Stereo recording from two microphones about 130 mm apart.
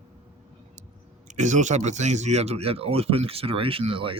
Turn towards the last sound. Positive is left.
turn(degrees=-45)  # may be behind; listen again after turning